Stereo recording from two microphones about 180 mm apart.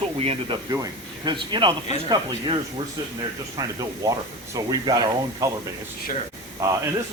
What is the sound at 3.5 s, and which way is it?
Speech, 20° right (ahead or behind).